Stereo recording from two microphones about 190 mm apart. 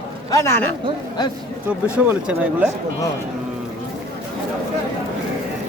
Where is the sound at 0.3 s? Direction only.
15° left (ahead or behind).